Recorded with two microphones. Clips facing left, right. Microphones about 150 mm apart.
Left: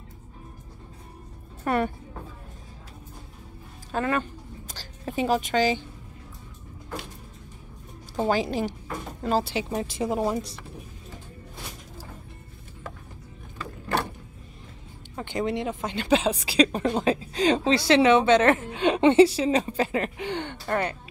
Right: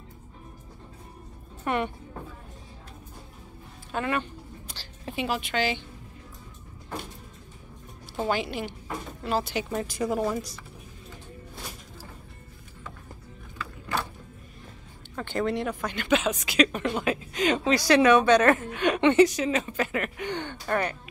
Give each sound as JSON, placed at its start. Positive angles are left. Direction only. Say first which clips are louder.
{"t": 1.6, "sound": "speech", "louder": "left 3 dB", "side_deg": 40}
{"t": 3.9, "sound": "a woman's voice", "louder": "left 2 dB", "side_deg": 40}
{"t": 8.2, "sound": "a woman's voice", "louder": "left 4 dB", "side_deg": 35}
{"t": 15.1, "sound": "speech", "louder": "even", "side_deg": 20}